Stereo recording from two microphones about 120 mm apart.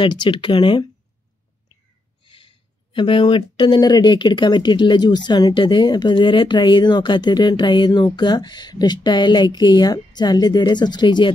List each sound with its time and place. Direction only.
0.0 s speech: 40° left (ahead or behind)
2.2 s speech: 45° left (ahead or behind)